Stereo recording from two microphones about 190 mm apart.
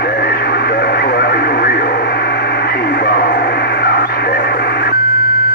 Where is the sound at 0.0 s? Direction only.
55° left (ahead or behind).